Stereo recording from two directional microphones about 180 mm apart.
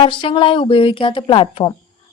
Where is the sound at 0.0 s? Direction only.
30° left (ahead or behind).